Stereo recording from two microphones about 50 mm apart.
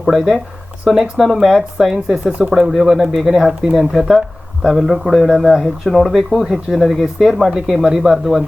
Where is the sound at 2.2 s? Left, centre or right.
Right.